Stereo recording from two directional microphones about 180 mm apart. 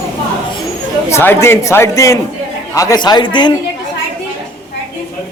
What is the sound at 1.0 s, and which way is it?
A man's voice, 15° left (ahead or behind).